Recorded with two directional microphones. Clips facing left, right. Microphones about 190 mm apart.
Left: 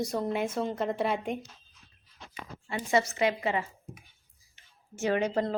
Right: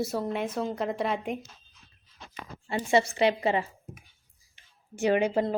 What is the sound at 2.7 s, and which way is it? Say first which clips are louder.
Speech: right 3 dB; 30° right (ahead or behind).